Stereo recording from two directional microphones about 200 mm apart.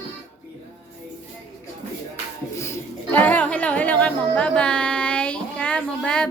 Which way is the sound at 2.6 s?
10° left (ahead or behind).